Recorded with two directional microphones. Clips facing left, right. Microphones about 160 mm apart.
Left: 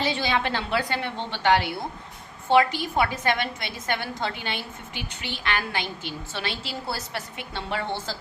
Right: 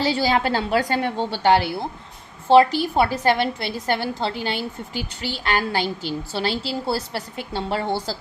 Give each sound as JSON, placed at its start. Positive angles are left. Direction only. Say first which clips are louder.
{"t": 0.0, "sound": "a woman's voice", "louder": "right 5 dB", "side_deg": -35}